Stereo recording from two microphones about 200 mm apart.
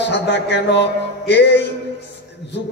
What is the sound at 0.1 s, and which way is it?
A man's voice, 60° left (ahead or behind).